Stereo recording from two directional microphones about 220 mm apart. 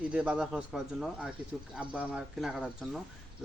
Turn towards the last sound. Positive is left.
turn(degrees=-5)  # may be behind; listen again after turning